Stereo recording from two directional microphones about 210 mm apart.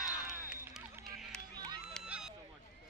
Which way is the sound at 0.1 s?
5° right (ahead or behind).